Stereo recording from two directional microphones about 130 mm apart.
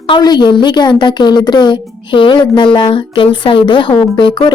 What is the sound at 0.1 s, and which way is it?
Speech, 35° left (ahead or behind).